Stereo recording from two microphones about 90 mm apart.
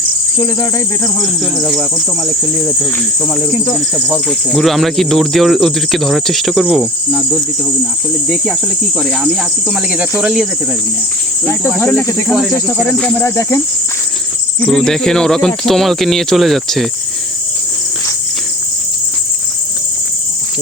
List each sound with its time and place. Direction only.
0.3 s cricket: 35° left (ahead or behind)
1.2 s speech: centre (ahead or behind)
6.7 s cricket: 10° right (ahead or behind)
8.3 s speech: centre (ahead or behind)
9.2 s cricket: 5° right (ahead or behind)
11.8 s speech: 20° left (ahead or behind)
12.3 s speech: centre (ahead or behind)
13.2 s cricket: 30° left (ahead or behind)
14.6 s speech: 5° left (ahead or behind)